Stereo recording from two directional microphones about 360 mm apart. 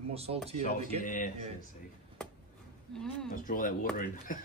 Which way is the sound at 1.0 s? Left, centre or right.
Left.